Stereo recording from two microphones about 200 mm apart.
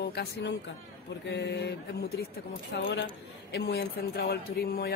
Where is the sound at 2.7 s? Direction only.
60° left (ahead or behind).